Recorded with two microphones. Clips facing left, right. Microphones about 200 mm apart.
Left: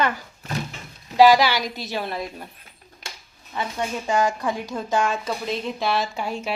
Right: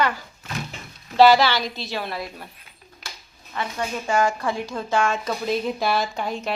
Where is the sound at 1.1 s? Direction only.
15° left (ahead or behind).